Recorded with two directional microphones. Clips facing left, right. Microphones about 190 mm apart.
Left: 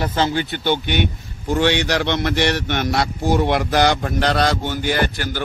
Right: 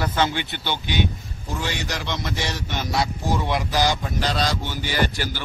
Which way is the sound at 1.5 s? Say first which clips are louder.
Left 11 dB; 70° left (ahead or behind).